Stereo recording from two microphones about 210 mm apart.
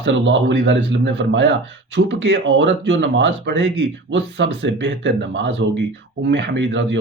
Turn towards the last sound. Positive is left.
turn(degrees=-60)  # may be behind; listen again after turning